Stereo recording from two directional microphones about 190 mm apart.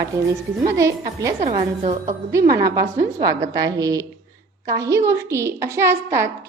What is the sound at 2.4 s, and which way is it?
Speech, 55° right (ahead or behind).